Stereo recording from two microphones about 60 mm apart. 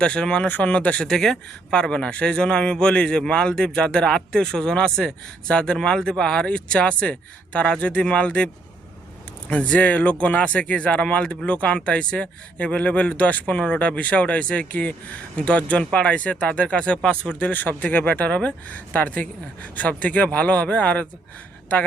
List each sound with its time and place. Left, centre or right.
0.0 s speech: centre
1.0 s a man's voice: centre
9.5 s speech: left